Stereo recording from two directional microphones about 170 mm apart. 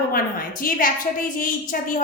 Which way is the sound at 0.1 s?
55° left (ahead or behind).